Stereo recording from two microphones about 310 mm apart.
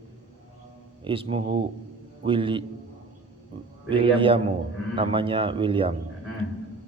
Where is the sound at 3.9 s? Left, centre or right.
Centre.